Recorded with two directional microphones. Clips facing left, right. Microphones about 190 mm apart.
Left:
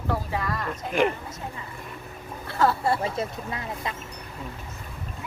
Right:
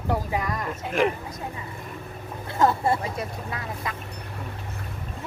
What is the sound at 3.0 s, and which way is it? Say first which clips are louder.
Speech: left 2 dB; 25° left (ahead or behind).